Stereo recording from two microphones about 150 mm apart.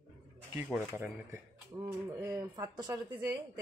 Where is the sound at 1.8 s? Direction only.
20° right (ahead or behind).